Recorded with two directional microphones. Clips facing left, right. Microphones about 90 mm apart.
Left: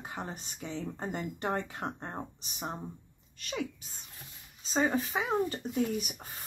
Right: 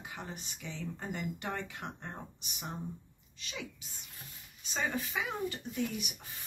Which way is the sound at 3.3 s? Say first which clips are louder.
Left 7 dB; 50° left (ahead or behind).